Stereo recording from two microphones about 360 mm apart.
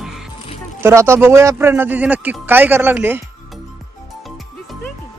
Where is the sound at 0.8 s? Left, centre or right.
Centre.